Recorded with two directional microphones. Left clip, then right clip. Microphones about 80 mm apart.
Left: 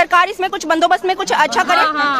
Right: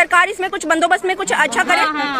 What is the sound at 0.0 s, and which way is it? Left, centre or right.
Speech, left.